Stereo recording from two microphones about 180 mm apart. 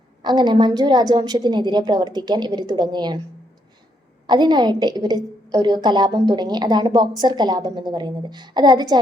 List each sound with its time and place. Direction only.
0.2 s a woman's voice: 25° right (ahead or behind)
4.3 s a woman's voice: 25° right (ahead or behind)